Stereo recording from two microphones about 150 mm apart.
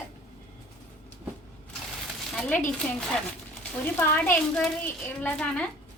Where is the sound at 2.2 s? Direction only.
10° left (ahead or behind).